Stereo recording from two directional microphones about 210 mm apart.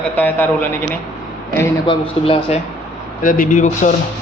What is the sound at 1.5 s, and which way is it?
A man's voice, 25° left (ahead or behind).